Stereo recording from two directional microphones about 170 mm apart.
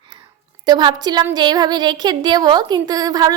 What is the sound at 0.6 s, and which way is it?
Speech, 25° right (ahead or behind).